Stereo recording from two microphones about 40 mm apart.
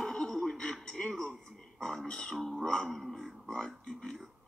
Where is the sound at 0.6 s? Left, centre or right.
Left.